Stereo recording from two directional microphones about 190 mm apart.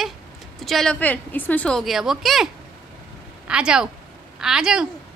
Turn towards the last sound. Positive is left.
turn(degrees=-5)  # may be behind; listen again after turning